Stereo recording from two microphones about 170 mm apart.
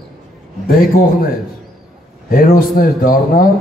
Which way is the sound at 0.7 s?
60° left (ahead or behind).